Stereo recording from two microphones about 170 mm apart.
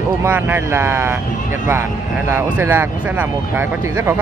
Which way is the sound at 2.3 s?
15° right (ahead or behind).